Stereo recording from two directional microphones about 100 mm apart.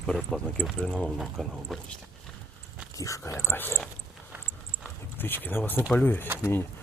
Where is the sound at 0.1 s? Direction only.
5° left (ahead or behind).